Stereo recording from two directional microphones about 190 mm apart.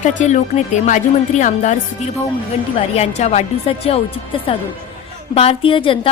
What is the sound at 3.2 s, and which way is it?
Speech, 35° left (ahead or behind).